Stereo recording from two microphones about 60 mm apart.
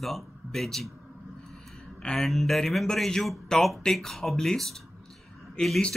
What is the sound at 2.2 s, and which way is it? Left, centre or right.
Speech, centre.